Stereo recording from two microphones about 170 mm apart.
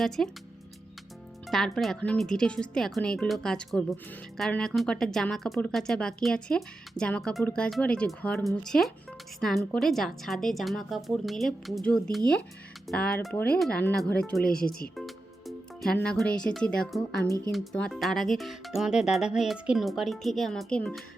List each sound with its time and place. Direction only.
0.2 s speech: 5° left (ahead or behind)
1.5 s speech: centre (ahead or behind)
14.4 s speech: 60° left (ahead or behind)
14.9 s music: centre (ahead or behind)
16.0 s speech: 5° left (ahead or behind)